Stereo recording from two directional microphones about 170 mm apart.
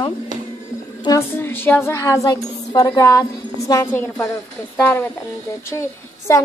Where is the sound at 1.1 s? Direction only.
15° left (ahead or behind).